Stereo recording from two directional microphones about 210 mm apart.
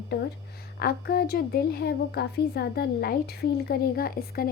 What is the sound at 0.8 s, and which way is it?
A woman's voice, 45° left (ahead or behind).